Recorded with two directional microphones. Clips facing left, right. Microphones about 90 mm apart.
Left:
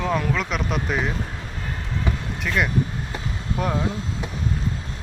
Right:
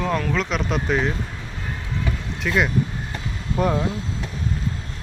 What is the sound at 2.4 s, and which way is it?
Speech, 5° right (ahead or behind).